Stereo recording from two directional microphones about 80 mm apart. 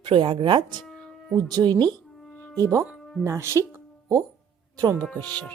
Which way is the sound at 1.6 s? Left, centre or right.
Right.